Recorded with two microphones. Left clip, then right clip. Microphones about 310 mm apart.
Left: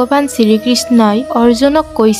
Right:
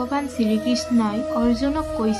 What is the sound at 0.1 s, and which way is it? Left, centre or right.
Music, left.